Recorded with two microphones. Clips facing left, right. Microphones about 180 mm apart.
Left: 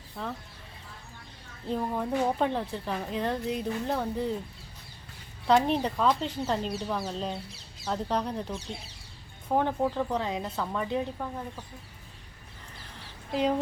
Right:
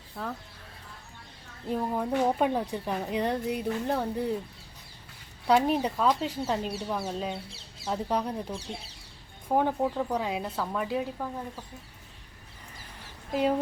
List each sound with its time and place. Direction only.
0.2 s speech: centre (ahead or behind)
1.6 s a woman's voice: 10° right (ahead or behind)
5.5 s a woman's voice: 10° right (ahead or behind)
12.7 s a sound: 45° right (ahead or behind)